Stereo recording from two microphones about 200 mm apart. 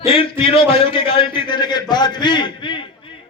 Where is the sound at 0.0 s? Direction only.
25° left (ahead or behind).